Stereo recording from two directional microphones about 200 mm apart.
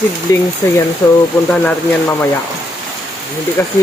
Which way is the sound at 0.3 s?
15° left (ahead or behind).